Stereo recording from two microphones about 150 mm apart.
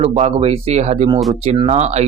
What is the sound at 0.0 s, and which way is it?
Speech, 45° right (ahead or behind).